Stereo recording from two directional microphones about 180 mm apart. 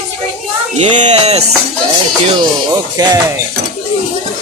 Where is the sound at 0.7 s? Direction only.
40° right (ahead or behind).